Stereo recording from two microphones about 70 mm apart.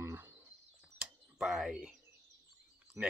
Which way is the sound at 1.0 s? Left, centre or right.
Centre.